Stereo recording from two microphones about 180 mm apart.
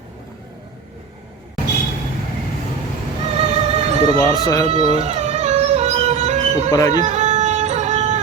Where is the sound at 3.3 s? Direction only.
35° right (ahead or behind).